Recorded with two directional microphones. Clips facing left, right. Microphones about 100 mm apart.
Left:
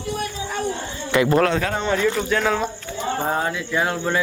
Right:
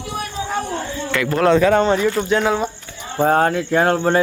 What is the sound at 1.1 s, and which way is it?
Speech, 20° left (ahead or behind).